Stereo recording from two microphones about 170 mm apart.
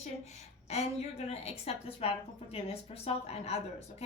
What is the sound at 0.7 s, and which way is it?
A woman's voice, 40° left (ahead or behind).